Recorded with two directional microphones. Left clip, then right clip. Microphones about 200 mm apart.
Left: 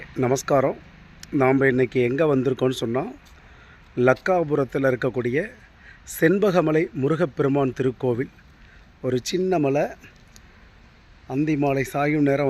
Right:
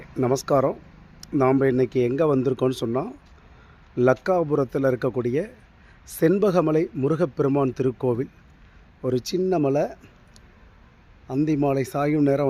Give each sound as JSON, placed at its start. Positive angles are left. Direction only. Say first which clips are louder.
{"t": 0.2, "sound": "a man's voice", "louder": "left 1 dB", "side_deg": 0}
{"t": 11.3, "sound": "speech", "louder": "even", "side_deg": -5}